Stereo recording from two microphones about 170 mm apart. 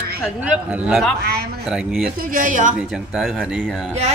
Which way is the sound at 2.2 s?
55° right (ahead or behind).